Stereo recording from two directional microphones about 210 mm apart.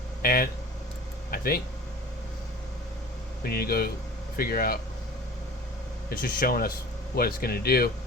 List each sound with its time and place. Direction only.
0.2 s speech: 45° left (ahead or behind)
3.4 s speech: 45° left (ahead or behind)
6.1 s speech: 45° left (ahead or behind)